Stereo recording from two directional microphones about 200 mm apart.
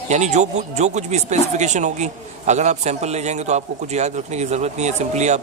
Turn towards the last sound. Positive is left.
turn(degrees=-35)  # may be behind; listen again after turning